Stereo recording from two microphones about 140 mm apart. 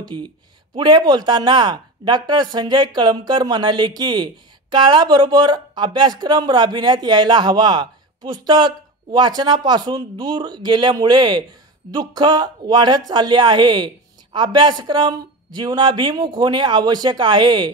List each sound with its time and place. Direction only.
0.0 s speech: 30° right (ahead or behind)